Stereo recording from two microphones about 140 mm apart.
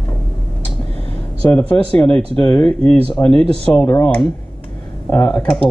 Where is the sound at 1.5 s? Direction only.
10° left (ahead or behind).